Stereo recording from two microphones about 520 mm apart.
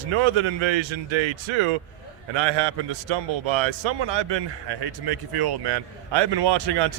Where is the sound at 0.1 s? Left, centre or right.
Right.